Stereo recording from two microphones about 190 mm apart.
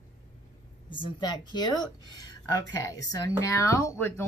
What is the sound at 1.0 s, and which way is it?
Speech, 20° left (ahead or behind).